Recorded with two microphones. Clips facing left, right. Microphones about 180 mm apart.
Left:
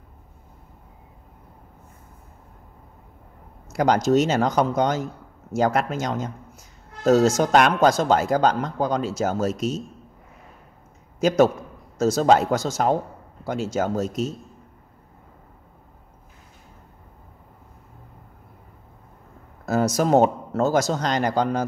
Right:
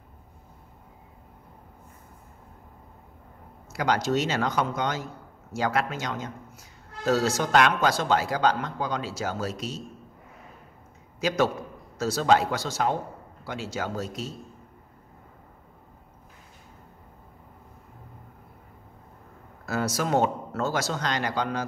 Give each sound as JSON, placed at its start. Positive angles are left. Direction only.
{"t": 3.7, "sound": "speech", "side_deg": 45}
{"t": 11.1, "sound": "a man's voice", "side_deg": 45}
{"t": 19.6, "sound": "speech", "side_deg": 45}